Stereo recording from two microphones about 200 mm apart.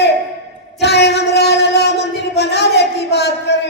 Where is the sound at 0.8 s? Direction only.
55° left (ahead or behind).